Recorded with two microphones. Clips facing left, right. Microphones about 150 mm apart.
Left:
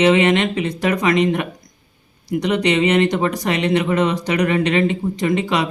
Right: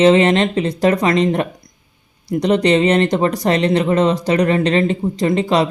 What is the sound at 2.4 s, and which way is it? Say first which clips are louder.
Speech: right 4 dB; 35° right (ahead or behind).